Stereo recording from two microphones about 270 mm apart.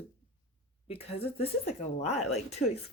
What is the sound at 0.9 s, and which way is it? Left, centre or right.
Speech, left.